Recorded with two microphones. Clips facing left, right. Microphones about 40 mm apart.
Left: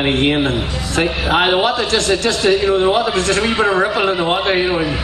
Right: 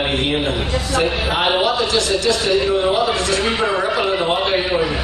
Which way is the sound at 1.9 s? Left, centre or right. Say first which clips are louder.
Left 1 dB; left.